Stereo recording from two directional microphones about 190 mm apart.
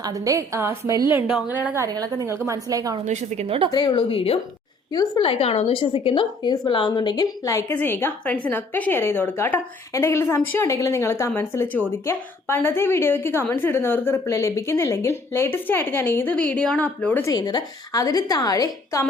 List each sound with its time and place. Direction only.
0.0 s a woman's voice: 20° right (ahead or behind)
3.0 s a woman's voice: 35° right (ahead or behind)
3.7 s a woman's voice: 20° left (ahead or behind)
17.3 s a woman's voice: 20° left (ahead or behind)